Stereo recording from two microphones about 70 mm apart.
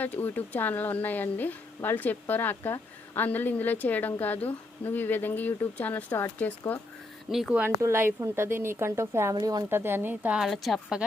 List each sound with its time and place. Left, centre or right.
0.0 s a woman's voice: left
7.3 s speech: centre
7.8 s a woman's voice: right
9.3 s speech: right
9.6 s a woman's voice: right
10.5 s speech: centre